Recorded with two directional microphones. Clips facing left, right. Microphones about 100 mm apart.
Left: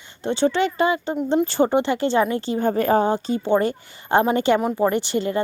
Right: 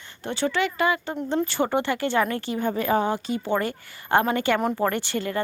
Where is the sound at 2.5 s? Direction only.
40° left (ahead or behind).